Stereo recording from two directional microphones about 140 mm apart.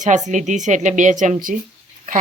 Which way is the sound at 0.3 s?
60° right (ahead or behind).